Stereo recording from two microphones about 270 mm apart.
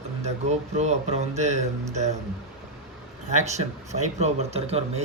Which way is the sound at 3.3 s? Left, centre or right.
Right.